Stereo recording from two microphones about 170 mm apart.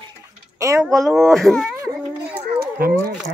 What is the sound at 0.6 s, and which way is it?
Speech, 15° right (ahead or behind).